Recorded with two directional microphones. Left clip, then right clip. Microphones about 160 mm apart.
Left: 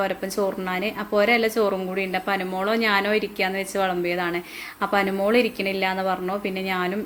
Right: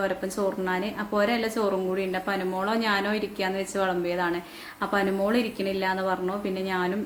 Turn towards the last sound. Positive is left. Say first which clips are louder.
# left 2 dB
turn(degrees=15)  # may be behind; listen again after turning